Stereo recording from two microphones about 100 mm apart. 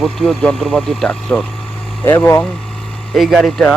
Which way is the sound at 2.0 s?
20° left (ahead or behind).